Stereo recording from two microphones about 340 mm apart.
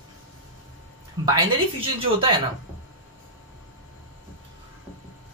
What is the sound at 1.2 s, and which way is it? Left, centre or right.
Speech, centre.